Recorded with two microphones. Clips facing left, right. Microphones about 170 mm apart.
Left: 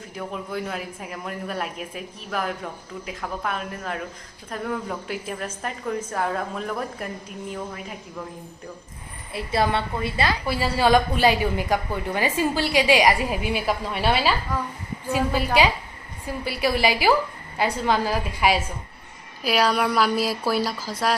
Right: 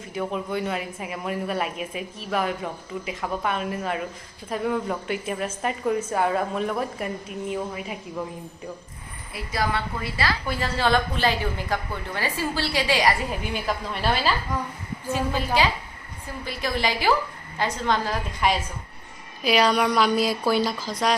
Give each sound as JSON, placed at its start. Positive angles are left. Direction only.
{"t": 0.1, "sound": "a woman's voice", "side_deg": 0}
{"t": 9.3, "sound": "a woman's voice", "side_deg": 25}
{"t": 10.4, "sound": "a woman's voice", "side_deg": 10}